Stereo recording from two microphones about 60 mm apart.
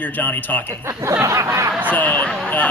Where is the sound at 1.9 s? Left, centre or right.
Left.